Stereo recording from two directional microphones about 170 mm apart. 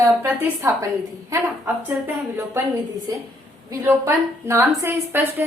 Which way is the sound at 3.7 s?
15° right (ahead or behind).